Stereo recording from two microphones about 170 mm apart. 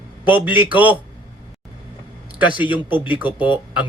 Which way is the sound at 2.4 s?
10° right (ahead or behind).